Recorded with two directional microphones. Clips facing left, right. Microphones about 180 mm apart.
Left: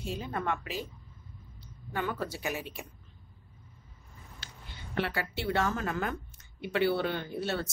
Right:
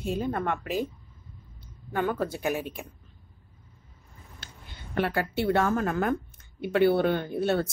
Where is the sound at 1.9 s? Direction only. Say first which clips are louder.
Right 6 dB; 50° right (ahead or behind).